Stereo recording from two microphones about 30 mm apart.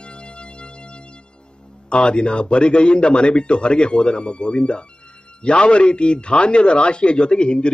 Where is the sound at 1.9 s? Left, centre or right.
Left.